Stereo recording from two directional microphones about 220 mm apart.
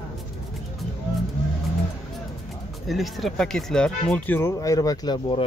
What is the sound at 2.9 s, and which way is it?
Speech, centre (ahead or behind).